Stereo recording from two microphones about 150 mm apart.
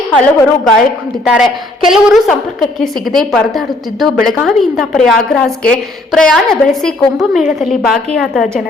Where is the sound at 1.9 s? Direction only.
Centre (ahead or behind).